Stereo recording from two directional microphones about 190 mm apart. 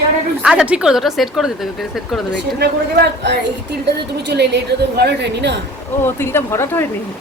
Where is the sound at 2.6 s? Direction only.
60° right (ahead or behind).